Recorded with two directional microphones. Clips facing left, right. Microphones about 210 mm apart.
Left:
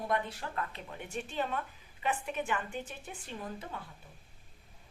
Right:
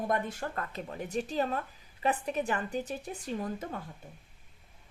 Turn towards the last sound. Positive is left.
turn(degrees=-40)  # may be behind; listen again after turning